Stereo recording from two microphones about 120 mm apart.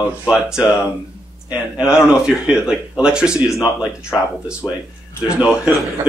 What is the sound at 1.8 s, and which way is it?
Speech, 25° left (ahead or behind).